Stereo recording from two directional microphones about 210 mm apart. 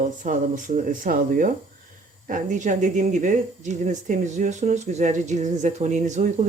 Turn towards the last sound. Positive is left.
turn(degrees=-35)  # may be behind; listen again after turning